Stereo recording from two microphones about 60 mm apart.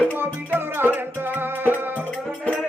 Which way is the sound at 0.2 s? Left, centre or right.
Right.